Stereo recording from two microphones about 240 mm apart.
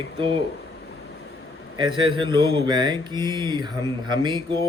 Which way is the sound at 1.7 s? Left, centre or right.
Right.